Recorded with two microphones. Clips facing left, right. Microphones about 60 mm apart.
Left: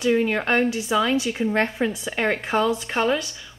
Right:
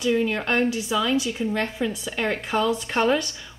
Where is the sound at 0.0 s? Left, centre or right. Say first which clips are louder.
Left 2 dB; left.